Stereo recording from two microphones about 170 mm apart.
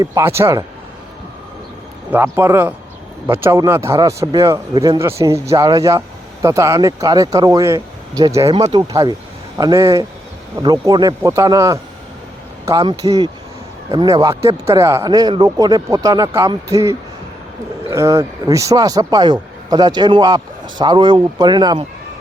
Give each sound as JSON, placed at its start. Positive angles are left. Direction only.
{"t": 0.0, "sound": "speech", "side_deg": -20}
{"t": 2.1, "sound": "a man's voice", "side_deg": -15}
{"t": 17.9, "sound": "a man's voice", "side_deg": -15}